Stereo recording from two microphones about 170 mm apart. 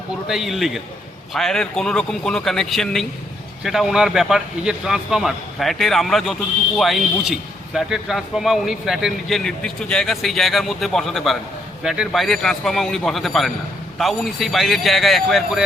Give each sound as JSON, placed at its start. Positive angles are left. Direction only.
{"t": 0.3, "sound": "speech", "side_deg": 0}